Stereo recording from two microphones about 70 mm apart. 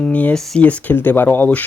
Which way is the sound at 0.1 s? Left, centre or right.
Left.